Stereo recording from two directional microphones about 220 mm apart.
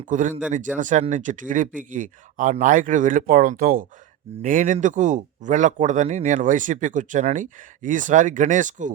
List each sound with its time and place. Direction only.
0.1 s speech: 35° right (ahead or behind)